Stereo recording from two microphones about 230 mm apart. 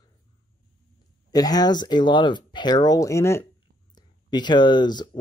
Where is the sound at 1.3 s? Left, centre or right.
Centre.